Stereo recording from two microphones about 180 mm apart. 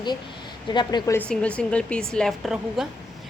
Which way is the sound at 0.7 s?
25° left (ahead or behind).